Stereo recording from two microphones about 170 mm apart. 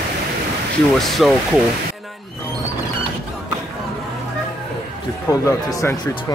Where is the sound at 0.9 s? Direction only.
Centre (ahead or behind).